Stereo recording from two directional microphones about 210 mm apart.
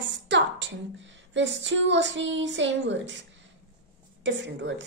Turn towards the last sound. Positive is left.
turn(degrees=-60)  # may be behind; listen again after turning